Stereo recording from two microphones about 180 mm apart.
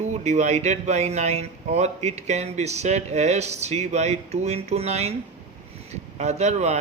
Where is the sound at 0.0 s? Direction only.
40° right (ahead or behind).